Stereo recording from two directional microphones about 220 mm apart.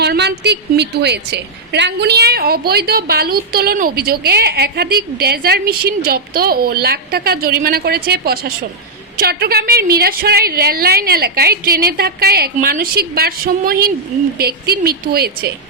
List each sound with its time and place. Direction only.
0.0 s a woman's voice: 50° right (ahead or behind)